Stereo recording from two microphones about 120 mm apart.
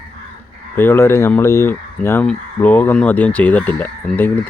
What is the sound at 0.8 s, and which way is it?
Speech, 20° left (ahead or behind).